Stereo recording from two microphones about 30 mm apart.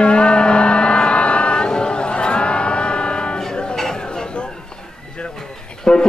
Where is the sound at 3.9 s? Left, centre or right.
Left.